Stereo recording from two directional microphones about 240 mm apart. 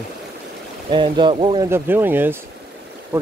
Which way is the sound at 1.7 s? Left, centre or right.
Centre.